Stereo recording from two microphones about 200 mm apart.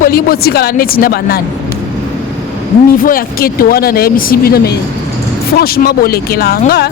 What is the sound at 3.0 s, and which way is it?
Speech, 45° left (ahead or behind).